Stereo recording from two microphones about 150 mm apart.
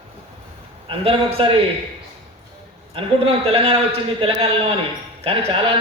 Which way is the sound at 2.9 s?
40° right (ahead or behind).